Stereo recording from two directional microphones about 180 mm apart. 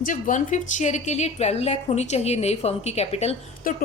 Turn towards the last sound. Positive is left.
turn(degrees=50)  # may be behind; listen again after turning